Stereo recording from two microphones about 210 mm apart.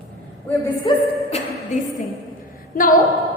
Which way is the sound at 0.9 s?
20° left (ahead or behind).